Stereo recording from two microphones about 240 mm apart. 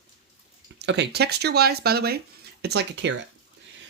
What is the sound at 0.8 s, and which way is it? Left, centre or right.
Speech, right.